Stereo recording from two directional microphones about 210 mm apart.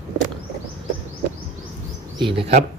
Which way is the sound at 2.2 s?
25° right (ahead or behind).